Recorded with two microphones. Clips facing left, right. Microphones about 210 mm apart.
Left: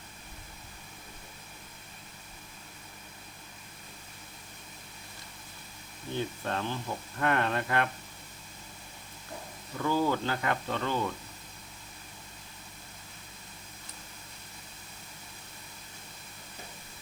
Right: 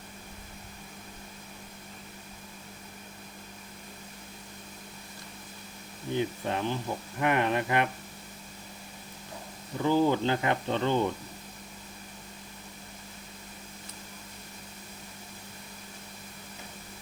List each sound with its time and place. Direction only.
6.1 s speech: 15° right (ahead or behind)
9.7 s speech: 20° right (ahead or behind)